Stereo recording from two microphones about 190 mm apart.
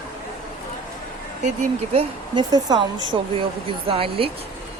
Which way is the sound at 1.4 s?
40° right (ahead or behind).